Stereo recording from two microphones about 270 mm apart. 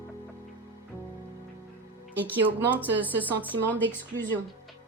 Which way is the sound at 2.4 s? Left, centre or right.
Centre.